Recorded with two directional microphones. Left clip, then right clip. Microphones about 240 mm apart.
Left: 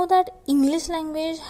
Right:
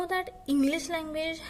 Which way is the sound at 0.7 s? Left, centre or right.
Centre.